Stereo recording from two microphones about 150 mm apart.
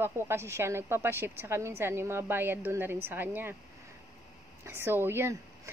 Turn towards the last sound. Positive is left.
turn(degrees=-15)  # may be behind; listen again after turning